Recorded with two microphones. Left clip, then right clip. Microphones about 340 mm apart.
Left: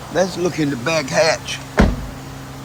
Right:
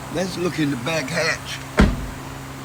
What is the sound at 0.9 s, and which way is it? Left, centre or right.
Speech, centre.